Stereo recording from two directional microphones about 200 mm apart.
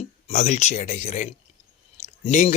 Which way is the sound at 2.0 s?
35° left (ahead or behind).